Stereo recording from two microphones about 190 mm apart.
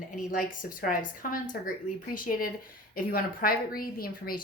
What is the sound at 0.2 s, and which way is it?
A woman's voice, 45° left (ahead or behind).